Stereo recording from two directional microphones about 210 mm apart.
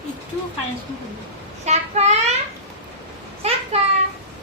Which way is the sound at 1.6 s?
30° right (ahead or behind).